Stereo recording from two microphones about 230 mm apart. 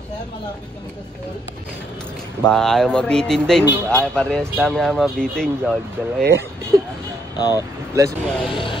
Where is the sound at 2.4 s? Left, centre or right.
Centre.